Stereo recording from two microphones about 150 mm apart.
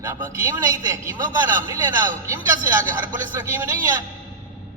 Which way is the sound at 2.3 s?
20° right (ahead or behind).